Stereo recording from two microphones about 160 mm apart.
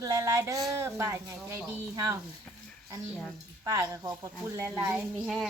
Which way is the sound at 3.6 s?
20° right (ahead or behind).